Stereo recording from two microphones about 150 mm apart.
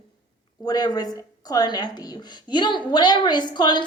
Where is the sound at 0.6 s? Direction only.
25° left (ahead or behind).